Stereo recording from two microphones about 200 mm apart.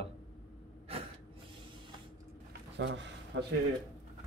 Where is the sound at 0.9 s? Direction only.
30° right (ahead or behind).